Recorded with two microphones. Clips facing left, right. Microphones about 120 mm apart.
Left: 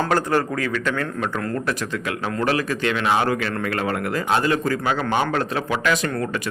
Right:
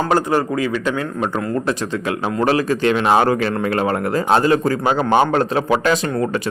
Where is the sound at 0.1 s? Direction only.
15° right (ahead or behind); by 3.5 s 35° right (ahead or behind).